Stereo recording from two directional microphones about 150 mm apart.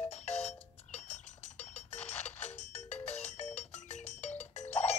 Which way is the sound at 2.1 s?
10° left (ahead or behind).